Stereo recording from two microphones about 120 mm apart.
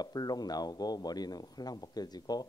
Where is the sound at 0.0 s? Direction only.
35° left (ahead or behind).